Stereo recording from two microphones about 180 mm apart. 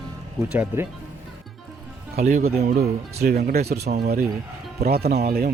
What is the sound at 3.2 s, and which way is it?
Speech, 55° right (ahead or behind).